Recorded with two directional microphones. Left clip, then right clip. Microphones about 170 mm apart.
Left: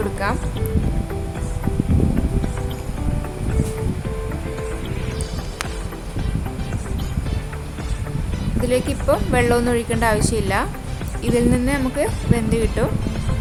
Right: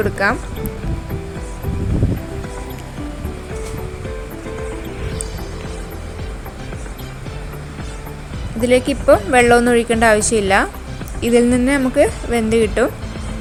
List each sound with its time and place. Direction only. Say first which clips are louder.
0.2 s a woman's voice: right 7 dB; 20° right (ahead or behind)
8.6 s a woman's voice: right 7 dB; 15° right (ahead or behind)